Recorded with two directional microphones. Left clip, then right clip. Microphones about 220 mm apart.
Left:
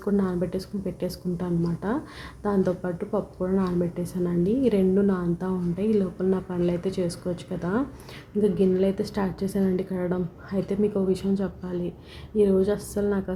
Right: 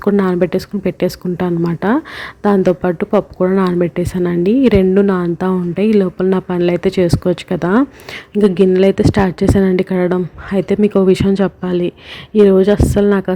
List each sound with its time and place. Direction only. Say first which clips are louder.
0.0 s speech: right 13 dB; 35° right (ahead or behind)